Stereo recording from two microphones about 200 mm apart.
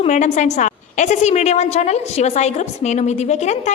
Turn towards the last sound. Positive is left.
turn(degrees=35)  # may be behind; listen again after turning